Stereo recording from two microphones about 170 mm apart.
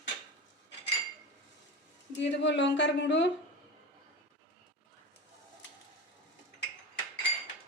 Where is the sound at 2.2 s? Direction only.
90° left.